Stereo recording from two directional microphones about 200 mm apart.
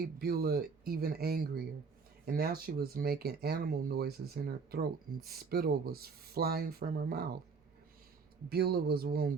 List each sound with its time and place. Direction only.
0.0 s speech: 50° right (ahead or behind)
8.4 s speech: 50° right (ahead or behind)